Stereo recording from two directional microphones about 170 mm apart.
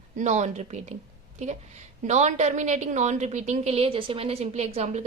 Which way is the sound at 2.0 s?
45° right (ahead or behind).